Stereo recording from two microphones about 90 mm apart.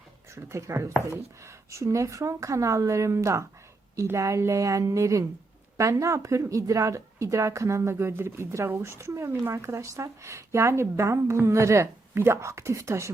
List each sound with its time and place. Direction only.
0.3 s a woman's voice: 30° right (ahead or behind)